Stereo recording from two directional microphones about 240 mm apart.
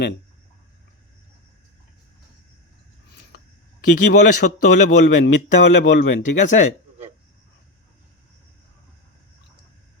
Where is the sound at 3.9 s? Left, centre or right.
Left.